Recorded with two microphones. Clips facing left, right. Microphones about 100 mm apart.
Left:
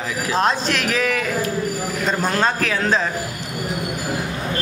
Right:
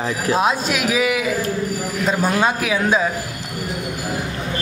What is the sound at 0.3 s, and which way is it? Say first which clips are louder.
A man's voice: right 1 dB; 10° right (ahead or behind).